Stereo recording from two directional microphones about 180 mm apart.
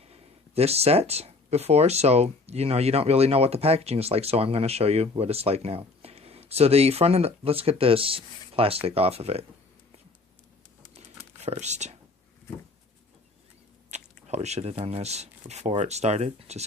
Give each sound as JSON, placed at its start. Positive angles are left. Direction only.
{"t": 0.0, "sound": "speech", "side_deg": -35}
{"t": 11.4, "sound": "speech", "side_deg": -40}
{"t": 13.9, "sound": "biting", "side_deg": -40}
{"t": 14.3, "sound": "speech", "side_deg": -35}